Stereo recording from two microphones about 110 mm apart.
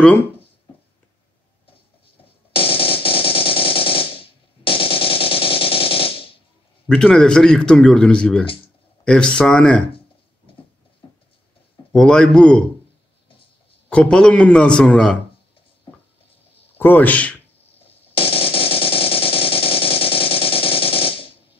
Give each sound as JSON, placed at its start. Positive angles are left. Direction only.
{"t": 2.5, "sound": "machine gun", "side_deg": 60}
{"t": 6.9, "sound": "speech", "side_deg": 10}
{"t": 11.9, "sound": "speech", "side_deg": 5}
{"t": 13.8, "sound": "speech", "side_deg": 10}
{"t": 16.7, "sound": "a man's voice", "side_deg": 15}
{"t": 18.1, "sound": "a sound", "side_deg": 60}